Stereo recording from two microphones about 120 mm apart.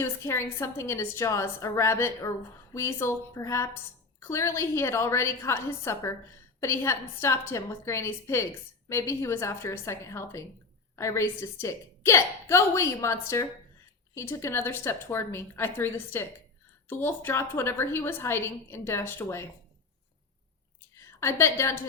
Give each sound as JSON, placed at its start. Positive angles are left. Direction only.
{"t": 0.0, "sound": "a woman's voice", "side_deg": 20}
{"t": 21.2, "sound": "a woman's voice", "side_deg": 25}